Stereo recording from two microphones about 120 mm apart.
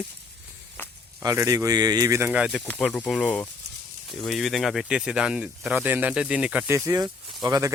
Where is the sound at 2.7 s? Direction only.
10° left (ahead or behind); by 6.7 s 10° right (ahead or behind).